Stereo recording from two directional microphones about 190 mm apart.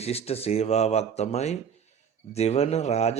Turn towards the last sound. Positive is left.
turn(degrees=35)  # may be behind; listen again after turning